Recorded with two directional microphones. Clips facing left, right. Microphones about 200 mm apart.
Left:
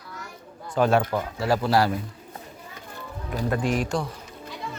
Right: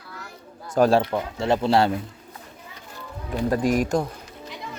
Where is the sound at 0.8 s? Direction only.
30° right (ahead or behind).